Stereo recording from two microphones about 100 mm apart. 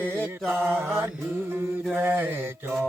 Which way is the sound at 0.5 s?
20° right (ahead or behind).